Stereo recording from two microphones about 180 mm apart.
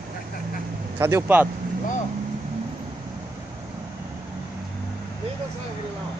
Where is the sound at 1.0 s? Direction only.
15° right (ahead or behind).